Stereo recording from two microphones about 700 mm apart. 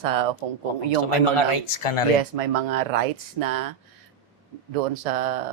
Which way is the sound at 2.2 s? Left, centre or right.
Right.